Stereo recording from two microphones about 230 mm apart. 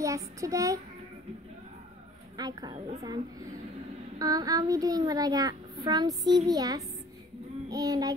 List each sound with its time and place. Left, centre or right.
0.0 s a child's voice: centre
2.3 s a child's voice: centre